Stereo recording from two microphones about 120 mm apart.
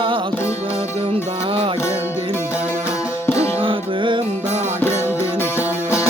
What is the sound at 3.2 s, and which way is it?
Music, 20° left (ahead or behind).